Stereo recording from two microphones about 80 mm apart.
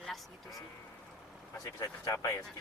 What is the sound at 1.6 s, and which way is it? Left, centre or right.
Speech, left.